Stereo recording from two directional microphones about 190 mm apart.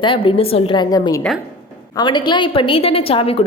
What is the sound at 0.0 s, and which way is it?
A woman's voice, 25° left (ahead or behind).